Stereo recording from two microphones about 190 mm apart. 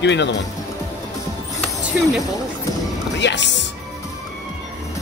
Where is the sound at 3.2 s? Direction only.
70° left (ahead or behind).